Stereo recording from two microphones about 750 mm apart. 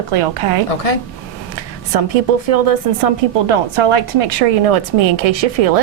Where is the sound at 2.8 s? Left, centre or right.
Right.